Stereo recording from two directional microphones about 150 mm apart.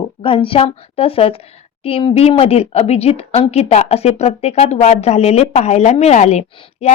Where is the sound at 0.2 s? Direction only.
35° left (ahead or behind).